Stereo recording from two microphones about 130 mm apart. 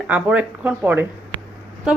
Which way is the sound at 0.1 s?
10° right (ahead or behind).